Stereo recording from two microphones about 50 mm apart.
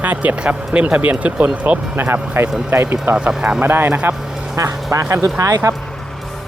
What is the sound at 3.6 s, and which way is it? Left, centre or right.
Speech, right.